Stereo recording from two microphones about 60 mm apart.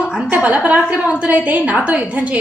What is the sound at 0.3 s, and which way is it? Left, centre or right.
A woman's voice, right.